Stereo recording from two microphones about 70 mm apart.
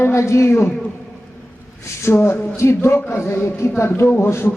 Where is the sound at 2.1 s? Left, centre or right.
Left.